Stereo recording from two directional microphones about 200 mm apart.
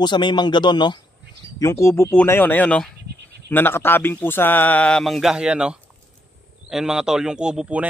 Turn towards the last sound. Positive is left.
turn(degrees=-5)  # may be behind; listen again after turning